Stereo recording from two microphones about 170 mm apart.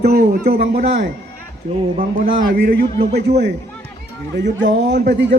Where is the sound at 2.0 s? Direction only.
55° right (ahead or behind).